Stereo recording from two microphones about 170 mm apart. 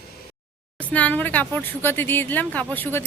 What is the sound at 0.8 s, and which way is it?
Speech, 10° left (ahead or behind).